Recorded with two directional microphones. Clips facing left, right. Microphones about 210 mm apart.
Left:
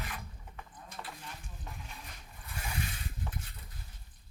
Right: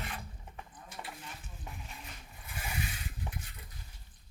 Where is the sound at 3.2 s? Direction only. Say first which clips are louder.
Even; 15° right (ahead or behind).